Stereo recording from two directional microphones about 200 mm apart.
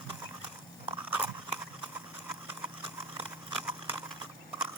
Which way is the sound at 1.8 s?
5° right (ahead or behind).